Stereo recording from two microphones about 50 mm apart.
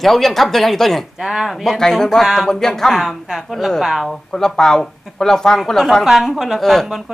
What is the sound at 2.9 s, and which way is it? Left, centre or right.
Speech, centre.